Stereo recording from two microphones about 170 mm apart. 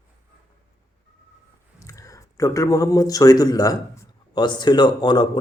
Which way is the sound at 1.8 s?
20° left (ahead or behind).